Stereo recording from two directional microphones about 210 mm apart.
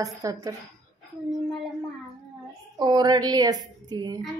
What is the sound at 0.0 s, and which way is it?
Speech, 15° right (ahead or behind).